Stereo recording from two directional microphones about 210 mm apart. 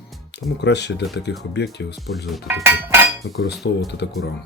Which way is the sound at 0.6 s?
55° left (ahead or behind).